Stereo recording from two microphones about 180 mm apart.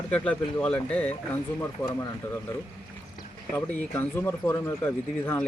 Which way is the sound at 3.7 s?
10° left (ahead or behind).